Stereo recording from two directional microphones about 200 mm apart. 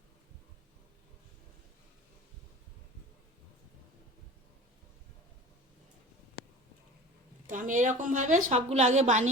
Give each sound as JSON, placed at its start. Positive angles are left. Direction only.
{"t": 7.4, "sound": "a woman's voice", "side_deg": -40}